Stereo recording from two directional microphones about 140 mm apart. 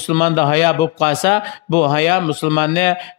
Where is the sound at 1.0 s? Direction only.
40° left (ahead or behind).